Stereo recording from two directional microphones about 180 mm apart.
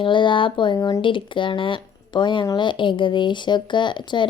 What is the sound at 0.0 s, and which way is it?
Speech, 25° left (ahead or behind).